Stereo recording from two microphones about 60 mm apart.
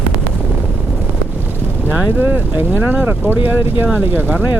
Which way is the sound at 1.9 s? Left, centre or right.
Right.